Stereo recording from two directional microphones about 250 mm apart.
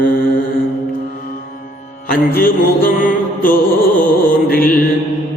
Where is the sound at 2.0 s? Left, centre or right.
Left.